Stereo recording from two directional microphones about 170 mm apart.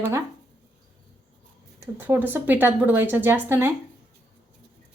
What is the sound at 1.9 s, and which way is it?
A woman's voice, 10° right (ahead or behind).